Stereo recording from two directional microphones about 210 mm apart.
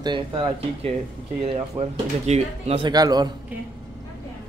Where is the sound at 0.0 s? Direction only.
25° right (ahead or behind).